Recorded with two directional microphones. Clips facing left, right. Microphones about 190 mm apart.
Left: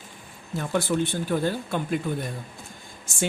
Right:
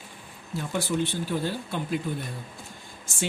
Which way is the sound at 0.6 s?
55° left (ahead or behind).